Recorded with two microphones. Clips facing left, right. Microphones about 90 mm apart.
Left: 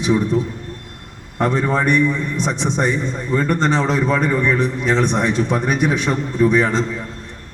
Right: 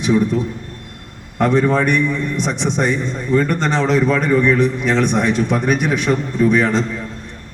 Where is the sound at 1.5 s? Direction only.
10° left (ahead or behind).